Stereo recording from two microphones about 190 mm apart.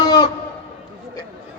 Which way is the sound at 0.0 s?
20° left (ahead or behind).